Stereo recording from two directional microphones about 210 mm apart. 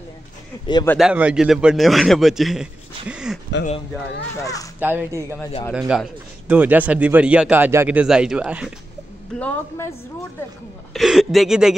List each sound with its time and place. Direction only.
0.9 s a man's voice: 5° right (ahead or behind)
4.4 s a woman's voice: 15° left (ahead or behind)
4.7 s a man's voice: 10° right (ahead or behind)
9.4 s a woman's voice: 10° left (ahead or behind)
10.9 s speech: centre (ahead or behind)